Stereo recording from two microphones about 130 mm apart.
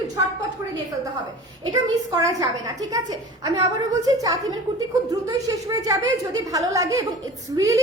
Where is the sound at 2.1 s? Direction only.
30° right (ahead or behind).